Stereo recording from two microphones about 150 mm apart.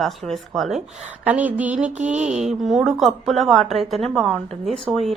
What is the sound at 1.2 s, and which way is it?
Speech, 10° right (ahead or behind).